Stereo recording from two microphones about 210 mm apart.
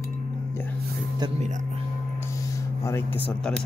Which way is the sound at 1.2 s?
30° right (ahead or behind).